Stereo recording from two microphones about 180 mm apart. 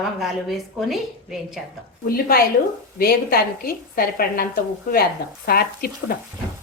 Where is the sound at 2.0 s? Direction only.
55° left (ahead or behind).